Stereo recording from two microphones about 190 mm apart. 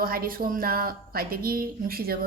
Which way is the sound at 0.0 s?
50° right (ahead or behind).